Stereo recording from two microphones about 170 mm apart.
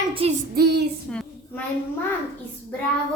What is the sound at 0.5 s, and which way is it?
Child singing, 75° right (ahead or behind).